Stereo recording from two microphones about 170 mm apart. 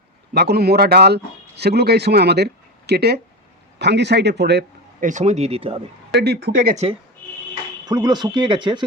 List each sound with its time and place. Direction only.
0.3 s speech: 70° right (ahead or behind)
3.8 s speech: 85° right
4.9 s speech: 45° right (ahead or behind)
6.1 s speech: 70° right (ahead or behind)
7.9 s speech: 25° right (ahead or behind)